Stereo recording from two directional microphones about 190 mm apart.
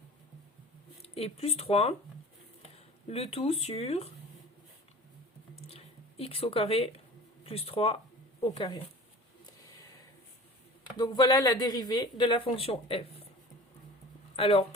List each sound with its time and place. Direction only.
1.0 s speech: 30° left (ahead or behind)
3.1 s speech: 30° left (ahead or behind)
5.6 s a sound: 30° left (ahead or behind)
7.4 s speech: 30° left (ahead or behind)
10.9 s speech: 20° left (ahead or behind)
14.3 s speech: 30° left (ahead or behind)